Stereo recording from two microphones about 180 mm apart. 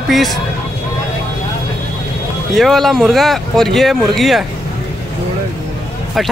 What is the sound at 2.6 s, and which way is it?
Speech, centre (ahead or behind).